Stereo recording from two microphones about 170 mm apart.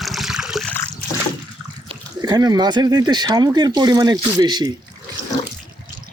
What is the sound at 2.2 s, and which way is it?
Speech, 20° right (ahead or behind).